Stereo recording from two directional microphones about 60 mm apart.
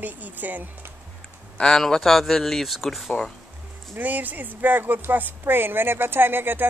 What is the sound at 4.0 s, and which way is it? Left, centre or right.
Speech, right.